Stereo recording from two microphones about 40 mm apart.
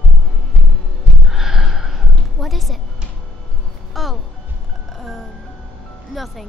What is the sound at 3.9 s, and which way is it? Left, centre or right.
Music, centre.